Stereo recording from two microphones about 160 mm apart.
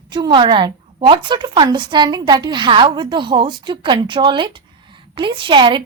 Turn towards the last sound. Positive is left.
turn(degrees=-30)  # may be behind; listen again after turning